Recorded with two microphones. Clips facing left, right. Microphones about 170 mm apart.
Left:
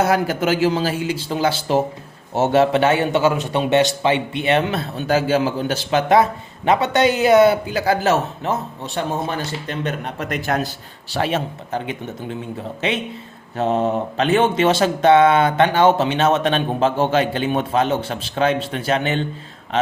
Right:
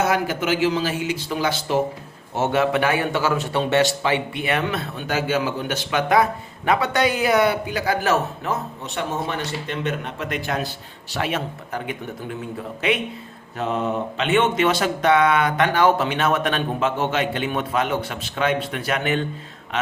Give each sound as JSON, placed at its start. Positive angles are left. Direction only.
{"t": 0.0, "sound": "speech", "side_deg": 40}
{"t": 11.1, "sound": "speech", "side_deg": 30}
{"t": 13.6, "sound": "speech", "side_deg": 30}